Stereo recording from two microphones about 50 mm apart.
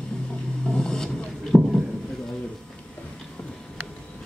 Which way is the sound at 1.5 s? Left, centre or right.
Centre.